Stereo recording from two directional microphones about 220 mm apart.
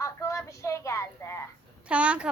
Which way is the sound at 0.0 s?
15° left (ahead or behind).